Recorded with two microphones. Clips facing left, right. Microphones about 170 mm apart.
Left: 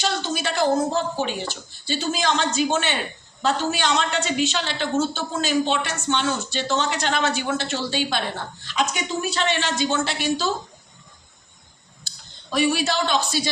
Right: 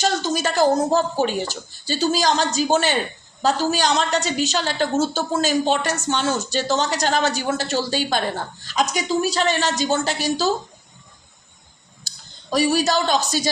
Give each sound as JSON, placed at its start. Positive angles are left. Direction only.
{"t": 0.0, "sound": "a woman's voice", "side_deg": -40}
{"t": 12.0, "sound": "speech", "side_deg": -40}